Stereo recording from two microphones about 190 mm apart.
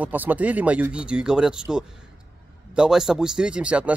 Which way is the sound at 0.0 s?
10° right (ahead or behind).